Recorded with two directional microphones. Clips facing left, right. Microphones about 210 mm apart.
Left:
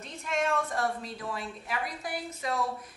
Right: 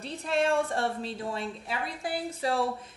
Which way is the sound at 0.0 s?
35° right (ahead or behind).